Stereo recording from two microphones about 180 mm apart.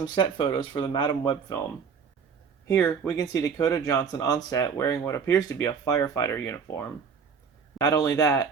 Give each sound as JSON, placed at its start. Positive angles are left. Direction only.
{"t": 0.0, "sound": "speech", "side_deg": 25}
{"t": 2.6, "sound": "speech", "side_deg": 15}